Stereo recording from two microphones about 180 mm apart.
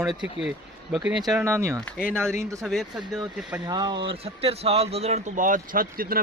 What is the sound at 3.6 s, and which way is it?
Speech, 25° right (ahead or behind).